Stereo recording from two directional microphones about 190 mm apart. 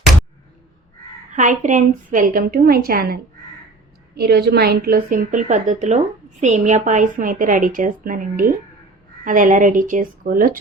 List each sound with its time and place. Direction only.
1.3 s a woman's voice: 40° right (ahead or behind)
4.2 s a woman's voice: 60° right (ahead or behind)